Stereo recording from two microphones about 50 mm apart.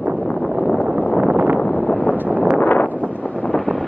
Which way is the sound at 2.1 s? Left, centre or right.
Right.